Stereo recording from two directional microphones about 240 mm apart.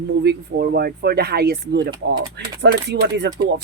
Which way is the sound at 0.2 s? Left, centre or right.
Right.